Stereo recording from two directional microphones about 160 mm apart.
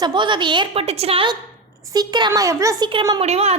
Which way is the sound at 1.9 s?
25° right (ahead or behind).